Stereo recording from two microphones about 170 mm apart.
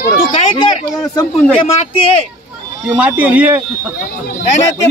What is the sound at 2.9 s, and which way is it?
Speech, 10° right (ahead or behind).